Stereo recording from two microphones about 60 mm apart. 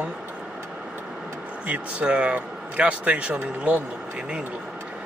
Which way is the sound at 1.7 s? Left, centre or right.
Right.